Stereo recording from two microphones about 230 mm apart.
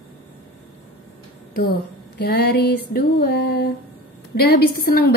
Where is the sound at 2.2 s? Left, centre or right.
Left.